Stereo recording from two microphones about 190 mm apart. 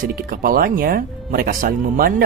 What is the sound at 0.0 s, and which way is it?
Speech, 50° right (ahead or behind).